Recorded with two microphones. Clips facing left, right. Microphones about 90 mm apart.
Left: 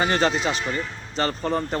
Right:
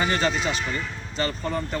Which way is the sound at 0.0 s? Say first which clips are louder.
Left 2 dB; 35° left (ahead or behind).